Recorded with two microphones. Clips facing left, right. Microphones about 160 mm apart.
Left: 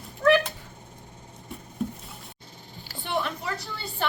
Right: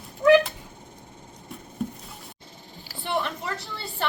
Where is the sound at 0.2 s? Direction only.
20° right (ahead or behind).